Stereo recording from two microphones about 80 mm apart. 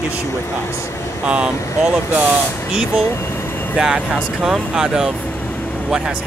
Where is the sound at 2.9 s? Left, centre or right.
Left.